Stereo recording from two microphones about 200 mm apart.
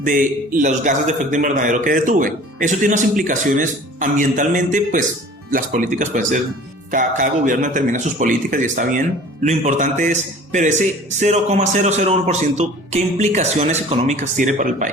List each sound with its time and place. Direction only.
0.0 s a man's voice: 40° right (ahead or behind)